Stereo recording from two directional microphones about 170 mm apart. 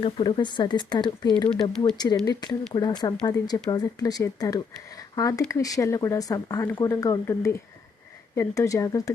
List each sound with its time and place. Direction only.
0.0 s speech: 25° left (ahead or behind)